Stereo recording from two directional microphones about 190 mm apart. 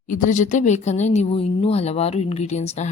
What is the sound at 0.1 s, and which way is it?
A woman's voice, 45° left (ahead or behind).